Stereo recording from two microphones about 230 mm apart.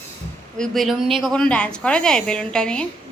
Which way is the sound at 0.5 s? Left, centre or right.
Centre.